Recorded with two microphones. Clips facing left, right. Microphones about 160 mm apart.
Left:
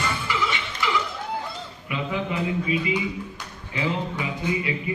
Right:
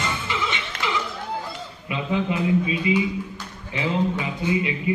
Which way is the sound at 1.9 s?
25° right (ahead or behind).